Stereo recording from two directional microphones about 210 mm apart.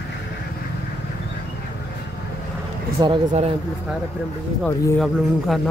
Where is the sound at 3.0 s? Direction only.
25° right (ahead or behind).